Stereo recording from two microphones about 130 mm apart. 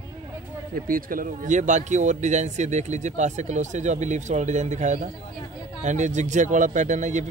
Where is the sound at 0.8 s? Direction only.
90° right.